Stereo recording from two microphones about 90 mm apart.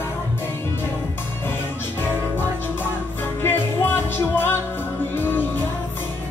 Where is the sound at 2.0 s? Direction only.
25° left (ahead or behind).